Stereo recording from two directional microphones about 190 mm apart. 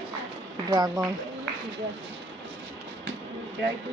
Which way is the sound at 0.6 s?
20° right (ahead or behind).